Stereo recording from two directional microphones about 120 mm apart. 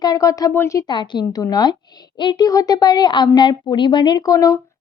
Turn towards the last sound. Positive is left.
turn(degrees=30)  # may be behind; listen again after turning